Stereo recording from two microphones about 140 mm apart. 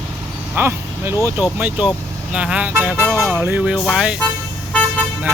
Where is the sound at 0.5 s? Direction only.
15° right (ahead or behind).